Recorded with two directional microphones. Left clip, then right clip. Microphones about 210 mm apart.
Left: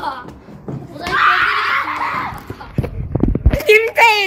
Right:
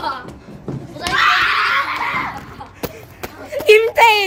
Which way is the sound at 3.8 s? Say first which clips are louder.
Even; 5° right (ahead or behind).